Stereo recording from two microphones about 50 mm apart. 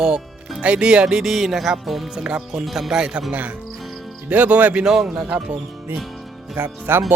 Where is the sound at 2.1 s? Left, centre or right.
Centre.